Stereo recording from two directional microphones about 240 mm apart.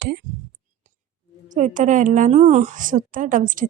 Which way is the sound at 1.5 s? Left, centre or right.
Right.